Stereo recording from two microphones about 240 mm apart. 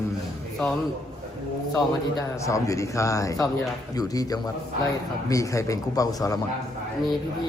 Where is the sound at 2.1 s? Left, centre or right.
Centre.